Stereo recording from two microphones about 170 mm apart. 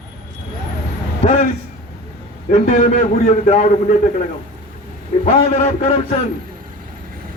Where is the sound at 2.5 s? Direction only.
45° left (ahead or behind).